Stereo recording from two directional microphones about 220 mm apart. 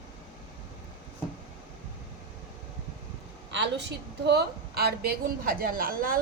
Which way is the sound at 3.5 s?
50° right (ahead or behind).